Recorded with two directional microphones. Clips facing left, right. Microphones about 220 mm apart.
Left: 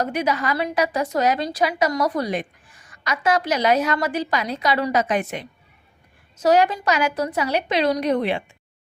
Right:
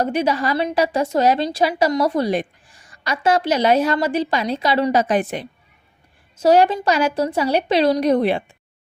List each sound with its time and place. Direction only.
0.0 s a woman's voice: 30° right (ahead or behind)